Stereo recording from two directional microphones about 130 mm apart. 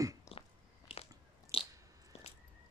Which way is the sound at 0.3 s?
25° left (ahead or behind).